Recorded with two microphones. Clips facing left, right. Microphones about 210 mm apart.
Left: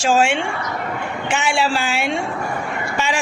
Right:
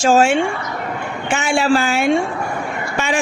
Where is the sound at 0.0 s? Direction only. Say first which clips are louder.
Right 4 dB; 40° right (ahead or behind).